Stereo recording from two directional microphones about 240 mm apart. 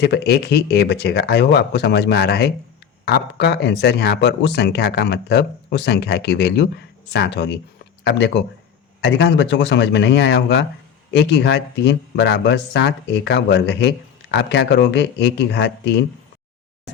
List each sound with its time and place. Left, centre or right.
0.0 s speech: left